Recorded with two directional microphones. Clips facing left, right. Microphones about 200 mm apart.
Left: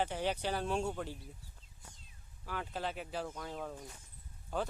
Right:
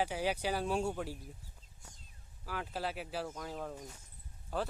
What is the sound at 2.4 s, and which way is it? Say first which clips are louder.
Speech: right 1 dB; centre (ahead or behind).